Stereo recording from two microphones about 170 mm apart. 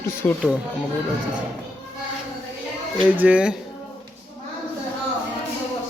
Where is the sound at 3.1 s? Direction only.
10° right (ahead or behind).